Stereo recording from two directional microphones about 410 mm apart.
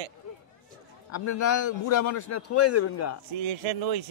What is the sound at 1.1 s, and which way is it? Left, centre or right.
A man's voice, left.